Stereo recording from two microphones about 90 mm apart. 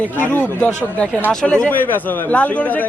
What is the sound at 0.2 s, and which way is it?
A man's voice, 20° left (ahead or behind).